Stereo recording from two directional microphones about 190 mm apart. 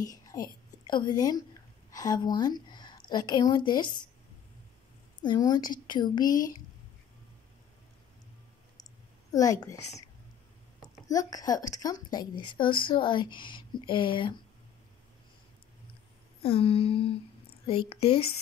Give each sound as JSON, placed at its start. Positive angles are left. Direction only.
{"t": 0.0, "sound": "a woman's voice", "side_deg": 20}
{"t": 5.2, "sound": "speech", "side_deg": 20}
{"t": 9.3, "sound": "a woman's voice", "side_deg": 20}
{"t": 11.1, "sound": "speech", "side_deg": 20}
{"t": 16.4, "sound": "speech", "side_deg": 30}